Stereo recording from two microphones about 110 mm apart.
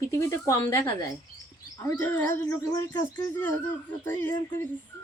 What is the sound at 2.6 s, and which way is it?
Speech, 30° left (ahead or behind).